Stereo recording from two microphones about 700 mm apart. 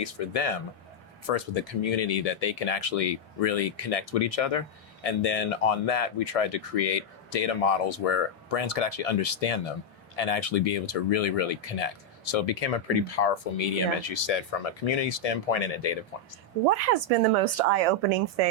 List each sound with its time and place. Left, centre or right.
0.0 s speech: left
16.6 s a woman's voice: right